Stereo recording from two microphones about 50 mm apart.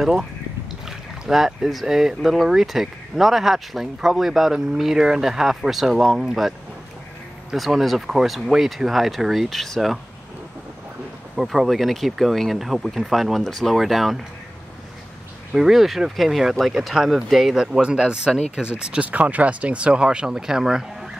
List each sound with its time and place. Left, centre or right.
0.0 s speech: centre
7.5 s speech: centre
11.3 s speech: centre
15.5 s speech: centre
17.8 s speech: centre
19.0 s speech: right; by 21.1 s centre